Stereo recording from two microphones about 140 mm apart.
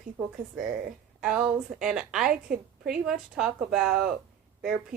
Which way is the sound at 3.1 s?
5° right (ahead or behind).